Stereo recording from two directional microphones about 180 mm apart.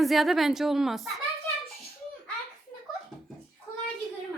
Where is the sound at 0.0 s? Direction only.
Centre (ahead or behind).